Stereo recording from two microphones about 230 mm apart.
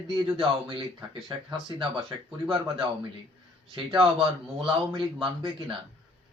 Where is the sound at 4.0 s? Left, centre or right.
Right.